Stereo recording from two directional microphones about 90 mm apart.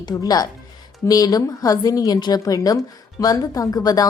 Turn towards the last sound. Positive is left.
turn(degrees=45)  # may be behind; listen again after turning